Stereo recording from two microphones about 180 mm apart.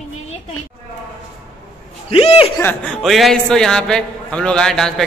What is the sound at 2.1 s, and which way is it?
Speech, 30° left (ahead or behind).